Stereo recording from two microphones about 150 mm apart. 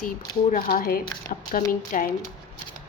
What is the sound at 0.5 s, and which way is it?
A woman's voice, 70° left (ahead or behind).